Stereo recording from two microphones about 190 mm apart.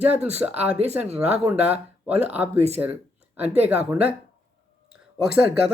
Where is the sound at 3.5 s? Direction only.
10° right (ahead or behind).